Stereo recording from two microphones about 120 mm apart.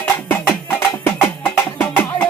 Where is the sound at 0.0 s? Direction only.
15° left (ahead or behind).